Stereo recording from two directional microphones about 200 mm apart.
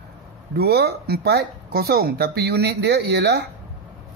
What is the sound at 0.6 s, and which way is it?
Speech, 55° right (ahead or behind).